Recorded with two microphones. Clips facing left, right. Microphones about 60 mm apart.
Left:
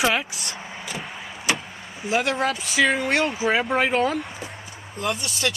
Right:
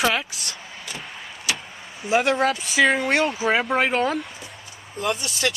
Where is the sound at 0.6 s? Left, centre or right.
Centre.